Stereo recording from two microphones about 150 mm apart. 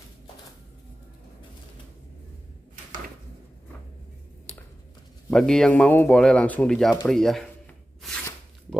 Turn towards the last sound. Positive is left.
turn(degrees=0)  # may be behind; listen again after turning